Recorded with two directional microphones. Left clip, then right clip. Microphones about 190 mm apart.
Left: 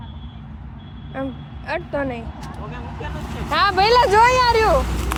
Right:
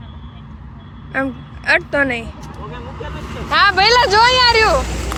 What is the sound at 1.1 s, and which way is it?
Speech, 25° right (ahead or behind).